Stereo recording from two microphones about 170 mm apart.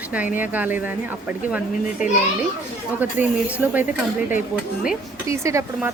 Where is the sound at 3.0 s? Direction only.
10° right (ahead or behind).